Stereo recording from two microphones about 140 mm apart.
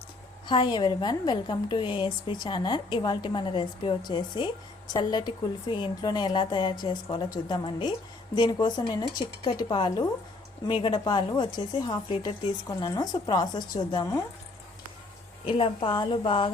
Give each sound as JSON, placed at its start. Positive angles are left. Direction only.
{"t": 0.4, "sound": "a woman's voice", "side_deg": 35}
{"t": 15.4, "sound": "a woman's voice", "side_deg": 40}